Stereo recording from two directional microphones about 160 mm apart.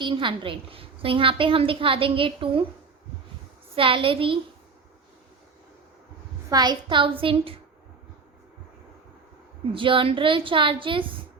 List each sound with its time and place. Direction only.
0.0 s a woman's voice: 30° right (ahead or behind)
3.8 s a woman's voice: 35° right (ahead or behind)
6.5 s a woman's voice: 25° right (ahead or behind)
9.7 s a woman's voice: 30° right (ahead or behind)